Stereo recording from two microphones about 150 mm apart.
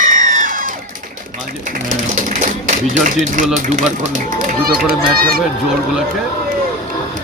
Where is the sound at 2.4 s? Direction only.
55° right (ahead or behind).